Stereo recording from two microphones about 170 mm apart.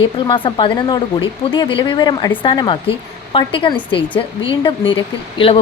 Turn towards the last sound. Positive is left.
turn(degrees=30)  # may be behind; listen again after turning